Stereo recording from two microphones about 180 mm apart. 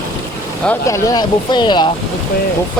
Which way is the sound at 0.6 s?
15° left (ahead or behind).